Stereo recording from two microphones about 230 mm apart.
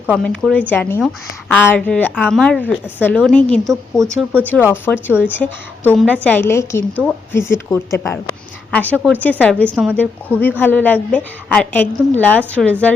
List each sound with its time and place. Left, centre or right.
0.1 s a woman's voice: centre